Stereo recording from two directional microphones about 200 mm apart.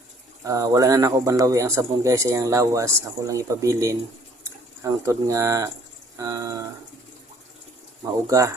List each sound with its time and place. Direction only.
0.4 s speech: 15° right (ahead or behind)
8.3 s speech: 15° right (ahead or behind)